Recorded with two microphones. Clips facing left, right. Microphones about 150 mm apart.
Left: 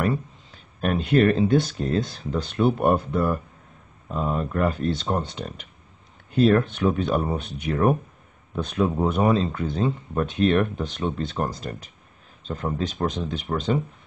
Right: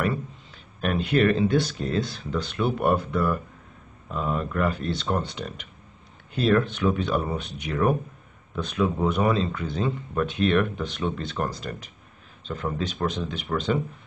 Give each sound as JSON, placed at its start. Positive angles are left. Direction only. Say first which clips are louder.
{"t": 0.7, "sound": "speech", "louder": "left 3 dB", "side_deg": 40}